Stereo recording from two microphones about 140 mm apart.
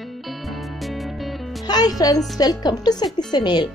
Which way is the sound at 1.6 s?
30° left (ahead or behind).